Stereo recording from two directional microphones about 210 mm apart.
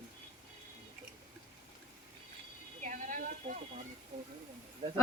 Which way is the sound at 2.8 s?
35° right (ahead or behind).